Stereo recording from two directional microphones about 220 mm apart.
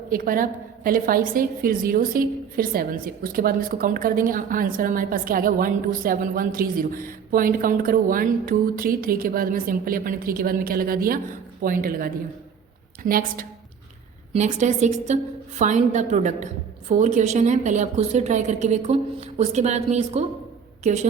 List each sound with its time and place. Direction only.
0.1 s a woman's voice: 40° right (ahead or behind)